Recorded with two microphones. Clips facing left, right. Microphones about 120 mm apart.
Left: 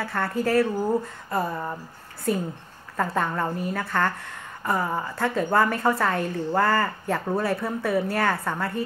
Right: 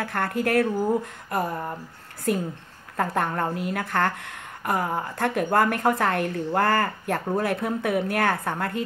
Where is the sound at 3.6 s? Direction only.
65° right (ahead or behind).